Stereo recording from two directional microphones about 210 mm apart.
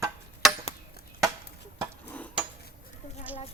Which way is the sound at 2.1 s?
5° left (ahead or behind).